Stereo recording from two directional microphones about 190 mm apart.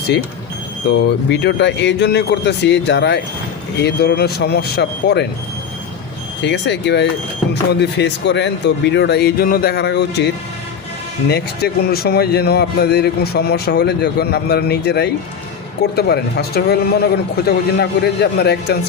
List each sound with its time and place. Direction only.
1.3 s a man's voice: 60° left (ahead or behind)
6.4 s a man's voice: 65° left (ahead or behind)